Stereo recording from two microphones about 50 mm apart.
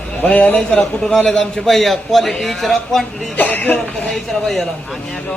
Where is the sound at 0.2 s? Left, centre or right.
Left.